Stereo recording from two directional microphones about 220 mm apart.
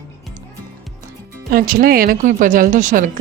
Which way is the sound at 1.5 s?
40° right (ahead or behind).